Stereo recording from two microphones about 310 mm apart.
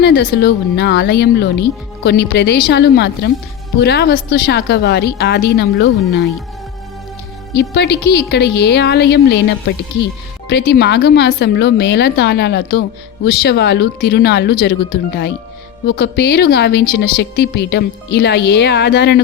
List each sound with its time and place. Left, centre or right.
0.0 s a woman's voice: left
7.5 s a woman's voice: left